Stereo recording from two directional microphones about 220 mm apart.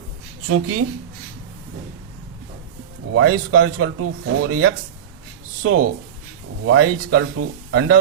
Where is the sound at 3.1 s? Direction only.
70° right (ahead or behind).